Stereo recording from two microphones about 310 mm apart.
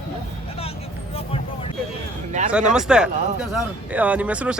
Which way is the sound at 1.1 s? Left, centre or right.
Centre.